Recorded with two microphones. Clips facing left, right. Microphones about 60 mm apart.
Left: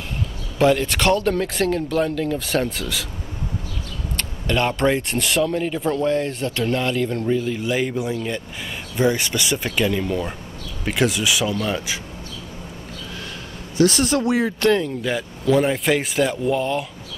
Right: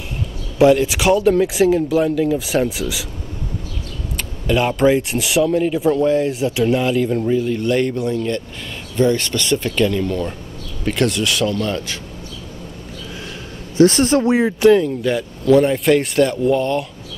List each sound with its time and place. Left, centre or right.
0.6 s speech: centre
4.2 s speech: centre
13.7 s speech: right
14.6 s speech: centre